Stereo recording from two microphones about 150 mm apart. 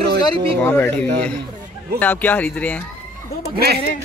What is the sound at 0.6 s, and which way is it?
Speech, 15° left (ahead or behind).